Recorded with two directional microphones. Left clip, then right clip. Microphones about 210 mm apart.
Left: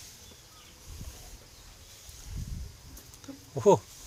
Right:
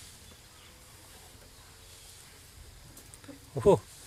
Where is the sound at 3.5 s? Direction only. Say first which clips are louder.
Left 1 dB; 5° right (ahead or behind).